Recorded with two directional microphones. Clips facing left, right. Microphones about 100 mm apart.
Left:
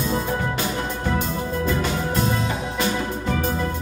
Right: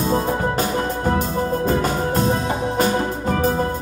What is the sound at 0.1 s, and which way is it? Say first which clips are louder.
Music: right 4 dB; 40° right (ahead or behind).